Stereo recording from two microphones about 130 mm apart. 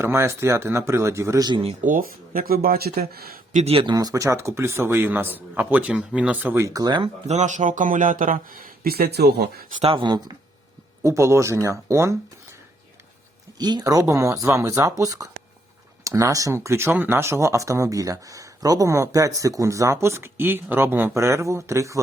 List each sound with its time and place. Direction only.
0.0 s speech: 20° right (ahead or behind)
1.5 s speech: 40° right (ahead or behind)
1.8 s speech: 90° right
3.5 s speech: 55° right (ahead or behind)
3.9 s speech: 25° right (ahead or behind)
6.7 s speech: 30° right (ahead or behind)
7.0 s speech: 60° right (ahead or behind); by 8.7 s 90° right
9.8 s speech: 40° right (ahead or behind)
11.0 s speech: 25° right (ahead or behind)
13.6 s speech: 30° right (ahead or behind)